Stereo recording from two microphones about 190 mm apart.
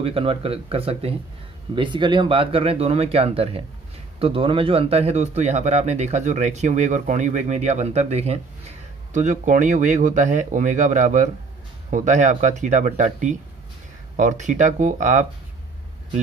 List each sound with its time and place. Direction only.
0.0 s speech: 30° right (ahead or behind)